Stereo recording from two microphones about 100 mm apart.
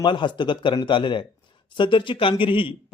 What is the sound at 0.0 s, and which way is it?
A man's voice, 50° left (ahead or behind).